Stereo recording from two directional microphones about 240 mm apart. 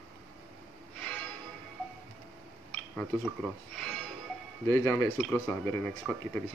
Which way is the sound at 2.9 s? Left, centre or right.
Centre.